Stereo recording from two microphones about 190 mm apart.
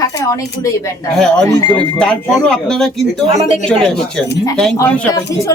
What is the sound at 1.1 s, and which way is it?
Speech, 5° left (ahead or behind).